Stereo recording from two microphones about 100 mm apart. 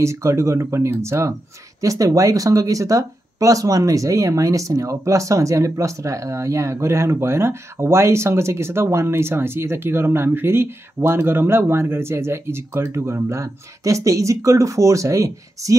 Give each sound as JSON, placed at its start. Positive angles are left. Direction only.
{"t": 0.0, "sound": "speech", "side_deg": -30}